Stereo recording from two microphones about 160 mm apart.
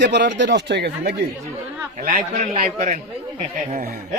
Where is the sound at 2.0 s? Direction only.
60° right (ahead or behind).